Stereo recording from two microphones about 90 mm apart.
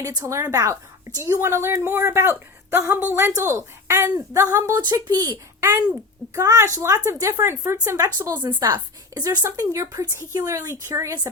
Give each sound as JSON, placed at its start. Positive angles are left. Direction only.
{"t": 0.0, "sound": "a woman's voice", "side_deg": -40}
{"t": 4.7, "sound": "speech", "side_deg": -55}
{"t": 5.3, "sound": "a child's voice", "side_deg": -30}
{"t": 9.4, "sound": "a woman's voice", "side_deg": -40}